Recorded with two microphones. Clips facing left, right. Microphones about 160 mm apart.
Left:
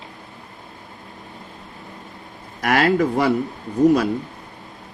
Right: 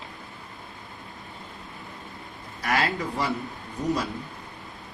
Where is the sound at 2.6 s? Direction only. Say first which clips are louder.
Left 9 dB; 70° left (ahead or behind).